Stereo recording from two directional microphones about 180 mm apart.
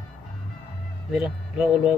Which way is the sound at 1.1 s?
5° right (ahead or behind).